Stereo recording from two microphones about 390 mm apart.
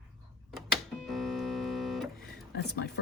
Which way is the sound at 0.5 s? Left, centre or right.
Centre.